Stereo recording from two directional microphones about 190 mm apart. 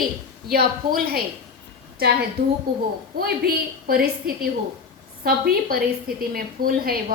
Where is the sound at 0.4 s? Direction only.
50° right (ahead or behind).